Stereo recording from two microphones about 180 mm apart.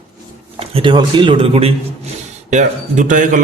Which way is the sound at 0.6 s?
30° right (ahead or behind).